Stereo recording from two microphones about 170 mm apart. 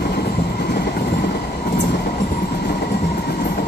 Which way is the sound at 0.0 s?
70° left (ahead or behind).